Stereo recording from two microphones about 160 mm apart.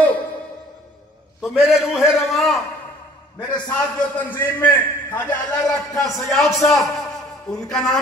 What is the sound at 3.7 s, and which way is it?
A man's voice, 10° left (ahead or behind).